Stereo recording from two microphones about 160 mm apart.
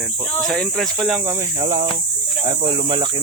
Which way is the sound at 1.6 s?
35° right (ahead or behind).